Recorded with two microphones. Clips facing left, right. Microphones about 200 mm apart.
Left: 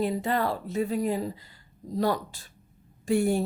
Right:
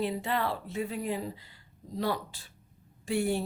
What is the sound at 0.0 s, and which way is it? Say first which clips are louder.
Speech: left 4 dB; 45° left (ahead or behind).